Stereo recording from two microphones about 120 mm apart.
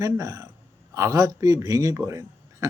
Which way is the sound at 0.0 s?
30° right (ahead or behind).